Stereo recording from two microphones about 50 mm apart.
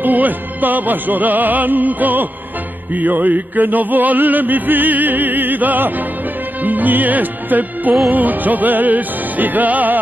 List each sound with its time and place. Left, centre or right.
0.0 s music: right